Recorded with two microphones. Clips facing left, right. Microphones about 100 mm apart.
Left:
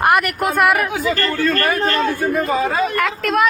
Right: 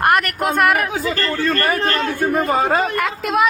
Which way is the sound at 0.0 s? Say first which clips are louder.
Left 1 dB; centre (ahead or behind).